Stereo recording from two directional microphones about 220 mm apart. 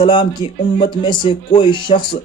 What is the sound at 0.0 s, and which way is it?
Speech, 20° left (ahead or behind).